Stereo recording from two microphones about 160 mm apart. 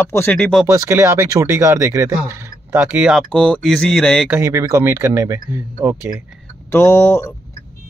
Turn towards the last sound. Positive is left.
turn(degrees=15)  # may be behind; listen again after turning